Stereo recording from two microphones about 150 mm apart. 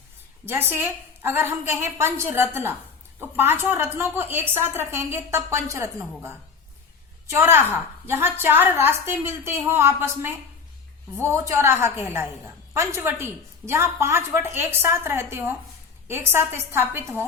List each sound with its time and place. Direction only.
0.4 s a woman's voice: 15° right (ahead or behind)